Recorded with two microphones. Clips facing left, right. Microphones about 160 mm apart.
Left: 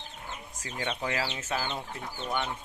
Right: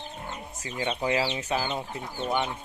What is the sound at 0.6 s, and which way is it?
Speech, 10° right (ahead or behind).